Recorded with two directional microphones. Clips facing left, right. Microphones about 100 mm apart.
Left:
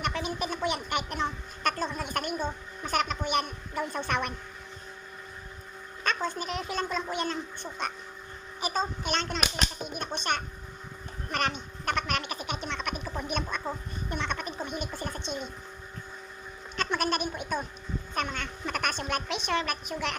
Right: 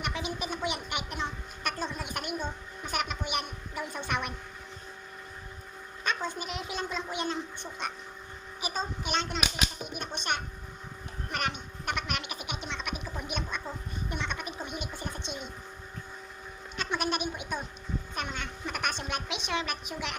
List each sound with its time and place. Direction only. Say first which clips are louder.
0.0 s speech: left 3 dB; 15° right (ahead or behind)
6.2 s speech: left 3 dB; 15° right (ahead or behind)
13.1 s a sound: left 4 dB; 15° right (ahead or behind)
14.1 s speech: left 4 dB; 15° right (ahead or behind)
16.7 s goat: left 3 dB; 15° right (ahead or behind)
18.2 s speech: left 6 dB; 15° right (ahead or behind)